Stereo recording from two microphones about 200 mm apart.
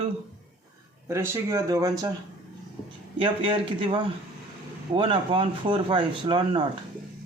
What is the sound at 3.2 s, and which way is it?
A man's voice, 25° right (ahead or behind).